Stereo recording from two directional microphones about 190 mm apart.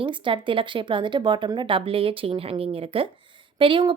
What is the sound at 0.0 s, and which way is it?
A woman's voice, 25° right (ahead or behind).